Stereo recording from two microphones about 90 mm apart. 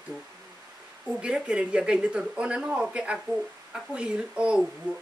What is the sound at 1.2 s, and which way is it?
Speech, 10° right (ahead or behind).